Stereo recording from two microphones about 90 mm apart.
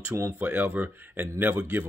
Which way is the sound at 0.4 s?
20° right (ahead or behind).